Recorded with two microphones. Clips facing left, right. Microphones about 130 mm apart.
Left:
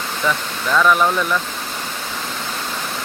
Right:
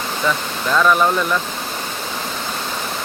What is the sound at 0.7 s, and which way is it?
Speech, 5° right (ahead or behind).